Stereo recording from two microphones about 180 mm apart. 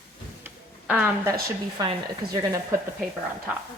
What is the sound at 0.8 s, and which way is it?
Speech, 5° right (ahead or behind).